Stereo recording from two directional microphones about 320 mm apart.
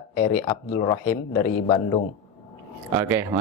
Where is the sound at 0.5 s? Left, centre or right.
Left.